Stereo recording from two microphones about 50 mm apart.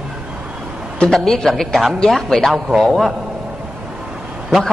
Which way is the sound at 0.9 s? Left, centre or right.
Centre.